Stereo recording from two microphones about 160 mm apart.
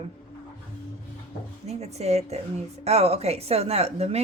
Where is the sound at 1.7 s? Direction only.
40° right (ahead or behind).